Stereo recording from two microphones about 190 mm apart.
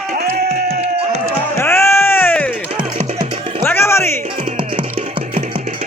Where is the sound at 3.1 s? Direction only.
25° right (ahead or behind).